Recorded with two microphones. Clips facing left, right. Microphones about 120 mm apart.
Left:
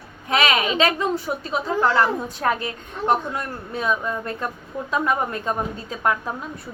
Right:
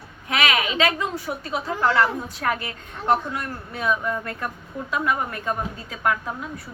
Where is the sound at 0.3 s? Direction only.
30° left (ahead or behind).